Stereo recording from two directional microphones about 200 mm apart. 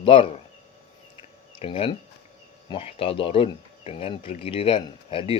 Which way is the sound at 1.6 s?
25° left (ahead or behind).